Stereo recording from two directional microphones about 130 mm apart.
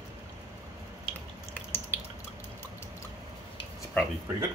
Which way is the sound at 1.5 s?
15° left (ahead or behind).